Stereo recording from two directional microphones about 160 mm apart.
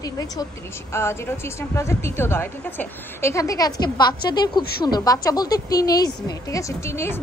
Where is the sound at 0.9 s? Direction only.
15° left (ahead or behind).